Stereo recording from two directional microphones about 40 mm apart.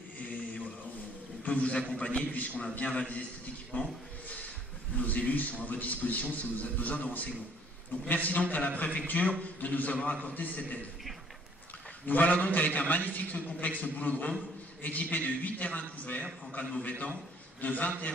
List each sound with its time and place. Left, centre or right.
1.5 s a man's voice: left
2.3 s a man's voice: left
3.7 s a man's voice: left
4.9 s a man's voice: left
12.1 s a man's voice: left